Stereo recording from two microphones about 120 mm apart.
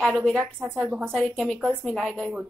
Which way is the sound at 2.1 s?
10° right (ahead or behind).